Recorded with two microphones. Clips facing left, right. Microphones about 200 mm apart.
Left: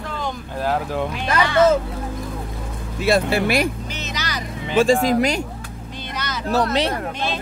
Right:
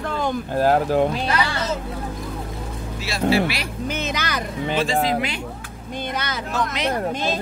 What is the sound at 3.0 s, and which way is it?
Speech, 55° left (ahead or behind).